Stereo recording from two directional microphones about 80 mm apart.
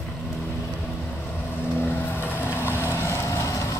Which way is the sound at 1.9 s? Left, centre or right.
Left.